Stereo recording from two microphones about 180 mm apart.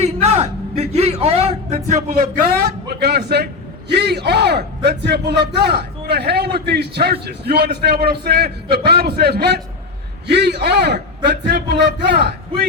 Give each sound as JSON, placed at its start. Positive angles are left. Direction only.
{"t": 0.0, "sound": "a man's voice", "side_deg": -40}